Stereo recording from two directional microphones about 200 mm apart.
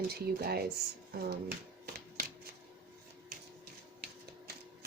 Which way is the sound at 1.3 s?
50° right (ahead or behind).